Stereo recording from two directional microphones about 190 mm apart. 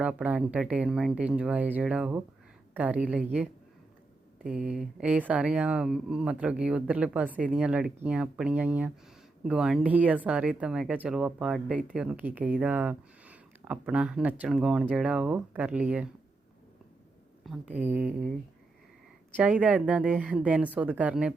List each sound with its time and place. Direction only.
0.0 s speech: 5° right (ahead or behind)
17.4 s speech: 5° right (ahead or behind)
19.4 s speech: 5° right (ahead or behind)